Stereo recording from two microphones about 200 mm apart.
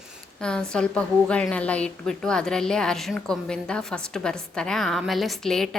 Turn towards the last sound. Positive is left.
turn(degrees=0)  # may be behind; listen again after turning